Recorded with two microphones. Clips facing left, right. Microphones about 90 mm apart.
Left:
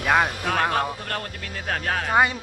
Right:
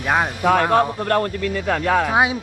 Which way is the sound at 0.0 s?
5° right (ahead or behind).